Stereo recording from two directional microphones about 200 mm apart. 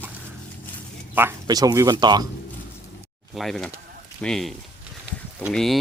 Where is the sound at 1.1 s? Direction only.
15° right (ahead or behind).